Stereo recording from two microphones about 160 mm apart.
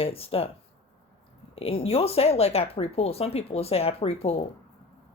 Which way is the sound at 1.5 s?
35° left (ahead or behind).